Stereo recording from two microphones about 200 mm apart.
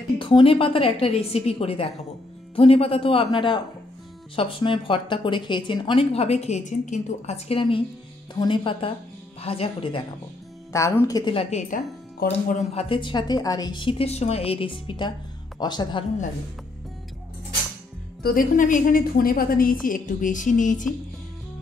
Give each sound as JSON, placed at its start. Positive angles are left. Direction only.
{"t": 0.2, "sound": "speech", "side_deg": 25}
{"t": 10.7, "sound": "speech", "side_deg": 15}
{"t": 11.5, "sound": "speech", "side_deg": 35}
{"t": 18.2, "sound": "a woman's voice", "side_deg": 45}